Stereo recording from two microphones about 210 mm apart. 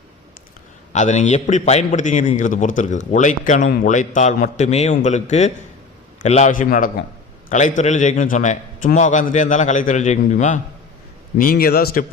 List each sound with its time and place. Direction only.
0.9 s a man's voice: 35° left (ahead or behind)